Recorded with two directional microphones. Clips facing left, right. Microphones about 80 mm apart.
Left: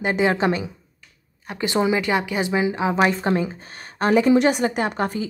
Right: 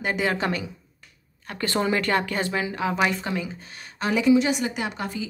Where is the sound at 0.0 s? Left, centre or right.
Left.